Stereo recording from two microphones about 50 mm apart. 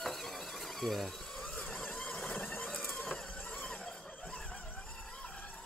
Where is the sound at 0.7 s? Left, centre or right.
Centre.